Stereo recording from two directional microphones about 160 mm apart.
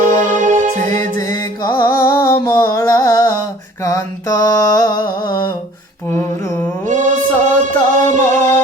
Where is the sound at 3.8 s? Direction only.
20° left (ahead or behind).